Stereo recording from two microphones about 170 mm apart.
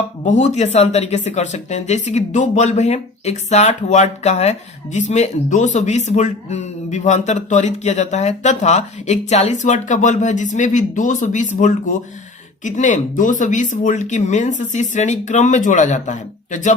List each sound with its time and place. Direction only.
0.3 s speech: 45° left (ahead or behind)